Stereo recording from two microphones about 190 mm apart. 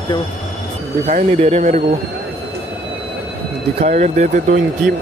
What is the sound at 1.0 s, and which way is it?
Speech, 35° right (ahead or behind).